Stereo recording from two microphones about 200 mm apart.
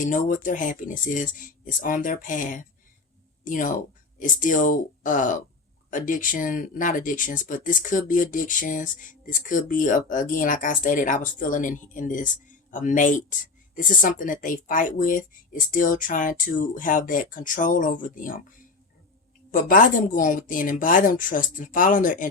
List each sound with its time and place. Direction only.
0.0 s speech: 40° left (ahead or behind)
19.5 s a woman's voice: 45° left (ahead or behind)